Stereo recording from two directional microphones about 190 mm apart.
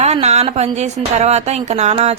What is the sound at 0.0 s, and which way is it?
A woman's voice, 35° right (ahead or behind).